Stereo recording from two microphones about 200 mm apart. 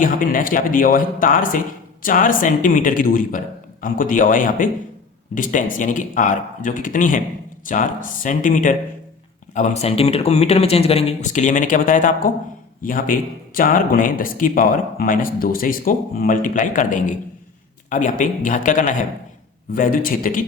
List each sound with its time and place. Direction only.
0.0 s speech: 45° left (ahead or behind)